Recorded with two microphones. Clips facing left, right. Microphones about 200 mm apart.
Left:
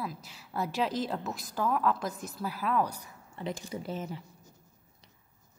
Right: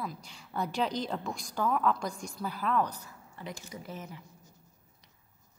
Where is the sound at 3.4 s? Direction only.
30° left (ahead or behind).